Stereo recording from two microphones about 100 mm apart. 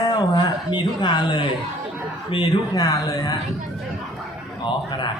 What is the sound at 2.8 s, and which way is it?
Speech, 35° left (ahead or behind).